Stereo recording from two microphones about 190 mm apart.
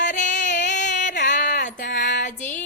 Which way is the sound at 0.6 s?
40° left (ahead or behind).